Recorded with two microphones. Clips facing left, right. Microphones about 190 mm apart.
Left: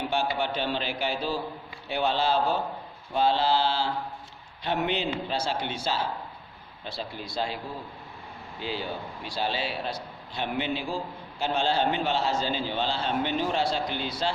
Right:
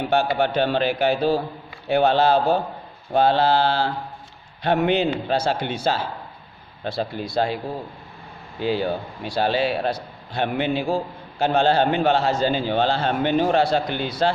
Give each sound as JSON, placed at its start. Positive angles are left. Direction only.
{"t": 0.0, "sound": "a man's voice", "side_deg": -60}